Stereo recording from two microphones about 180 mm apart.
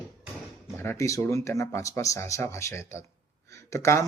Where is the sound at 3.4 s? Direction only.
15° left (ahead or behind).